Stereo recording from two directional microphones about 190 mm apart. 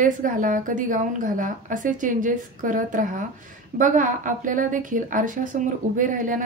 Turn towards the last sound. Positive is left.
turn(degrees=-45)  # may be behind; listen again after turning